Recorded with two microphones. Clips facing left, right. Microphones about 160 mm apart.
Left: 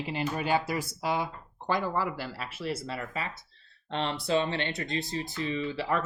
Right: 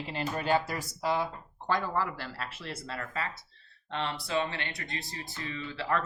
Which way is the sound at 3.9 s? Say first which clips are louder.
Left 4 dB; 25° left (ahead or behind).